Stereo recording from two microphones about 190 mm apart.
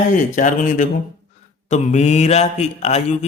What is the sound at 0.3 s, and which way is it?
Speech, 45° left (ahead or behind).